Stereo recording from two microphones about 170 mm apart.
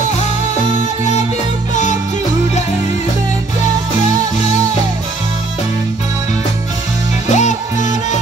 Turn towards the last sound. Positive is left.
turn(degrees=45)  # may be behind; listen again after turning